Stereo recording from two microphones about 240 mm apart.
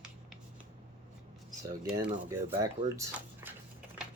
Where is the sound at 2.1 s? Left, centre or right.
Centre.